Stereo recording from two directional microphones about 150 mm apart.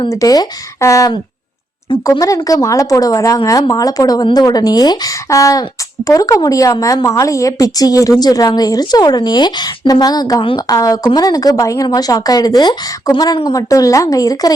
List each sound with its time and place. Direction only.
0.1 s a woman's voice: 25° left (ahead or behind)